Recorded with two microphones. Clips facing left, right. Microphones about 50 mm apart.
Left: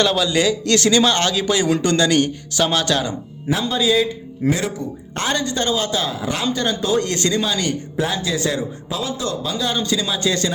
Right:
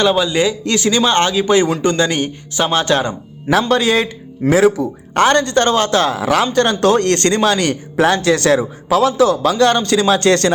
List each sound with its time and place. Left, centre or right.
0.0 s a man's voice: centre; by 3.2 s right
3.7 s speech: right